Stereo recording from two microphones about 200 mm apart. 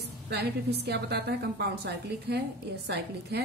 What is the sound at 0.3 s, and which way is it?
A woman's voice, 55° right (ahead or behind).